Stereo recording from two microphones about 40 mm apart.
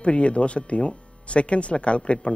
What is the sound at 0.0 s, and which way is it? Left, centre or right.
Speech, left.